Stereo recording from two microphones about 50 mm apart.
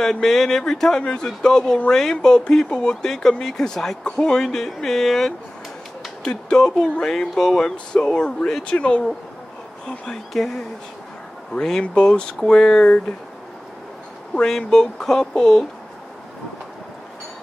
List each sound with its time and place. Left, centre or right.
0.0 s speech: centre
6.2 s speech: centre
9.8 s speech: centre
14.3 s speech: centre